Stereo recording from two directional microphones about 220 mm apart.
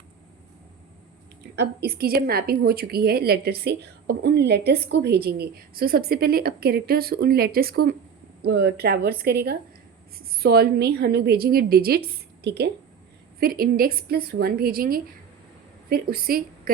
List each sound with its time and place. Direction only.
1.5 s a woman's voice: 45° right (ahead or behind)